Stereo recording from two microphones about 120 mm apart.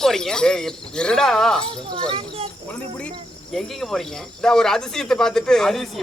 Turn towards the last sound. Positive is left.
turn(degrees=5)  # may be behind; listen again after turning